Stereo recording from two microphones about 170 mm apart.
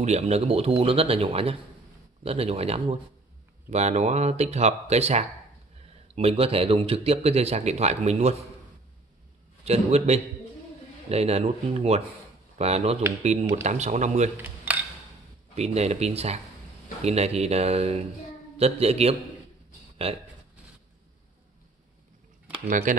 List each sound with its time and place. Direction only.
0.0 s a man's voice: 40° right (ahead or behind)
9.7 s a man's voice: 40° right (ahead or behind)
14.3 s dishes: 10° right (ahead or behind)
15.5 s a man's voice: 40° right (ahead or behind)
22.7 s speech: 50° right (ahead or behind)